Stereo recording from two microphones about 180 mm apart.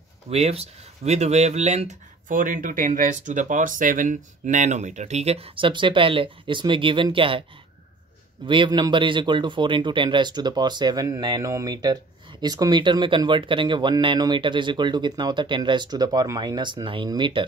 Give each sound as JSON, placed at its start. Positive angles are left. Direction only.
{"t": 0.3, "sound": "speech", "side_deg": -35}
{"t": 8.5, "sound": "speech", "side_deg": -25}